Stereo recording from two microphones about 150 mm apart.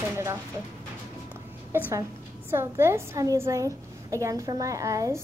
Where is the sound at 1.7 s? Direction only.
15° right (ahead or behind).